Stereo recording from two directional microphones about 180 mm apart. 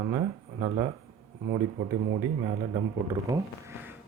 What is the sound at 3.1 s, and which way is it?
Speech, 15° right (ahead or behind).